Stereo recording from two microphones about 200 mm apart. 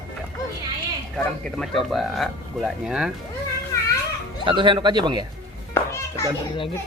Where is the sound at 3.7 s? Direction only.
15° left (ahead or behind).